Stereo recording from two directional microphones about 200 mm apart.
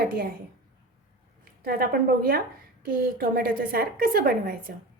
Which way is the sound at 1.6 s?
50° right (ahead or behind).